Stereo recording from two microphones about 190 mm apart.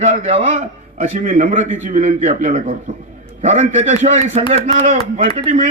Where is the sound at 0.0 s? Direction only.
35° right (ahead or behind).